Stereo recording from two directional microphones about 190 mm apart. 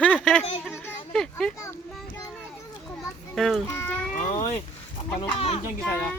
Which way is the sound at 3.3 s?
Centre (ahead or behind).